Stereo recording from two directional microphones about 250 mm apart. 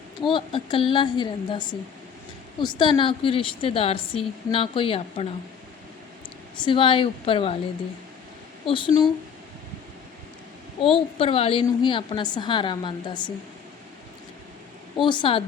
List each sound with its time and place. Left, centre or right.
0.3 s a woman's voice: centre
6.6 s a woman's voice: centre
8.6 s a woman's voice: centre
10.9 s a woman's voice: left
14.9 s a woman's voice: centre